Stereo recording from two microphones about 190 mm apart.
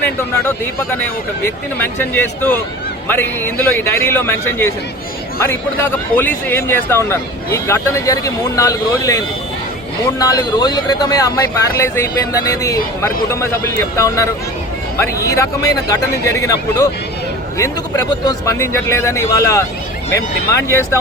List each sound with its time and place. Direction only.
0.0 s speech: 10° left (ahead or behind)
6.1 s speech: 10° left (ahead or behind)
20.7 s speech: 15° left (ahead or behind)